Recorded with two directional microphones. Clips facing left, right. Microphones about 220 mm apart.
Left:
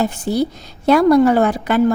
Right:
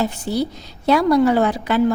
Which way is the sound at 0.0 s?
50° left (ahead or behind).